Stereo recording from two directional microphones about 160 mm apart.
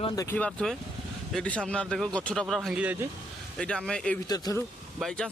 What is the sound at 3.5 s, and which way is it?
Speech, 5° left (ahead or behind).